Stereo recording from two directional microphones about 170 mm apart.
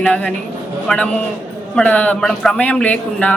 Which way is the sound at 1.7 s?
10° left (ahead or behind).